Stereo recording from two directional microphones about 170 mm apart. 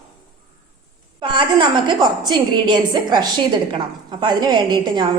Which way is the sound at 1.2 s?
30° right (ahead or behind).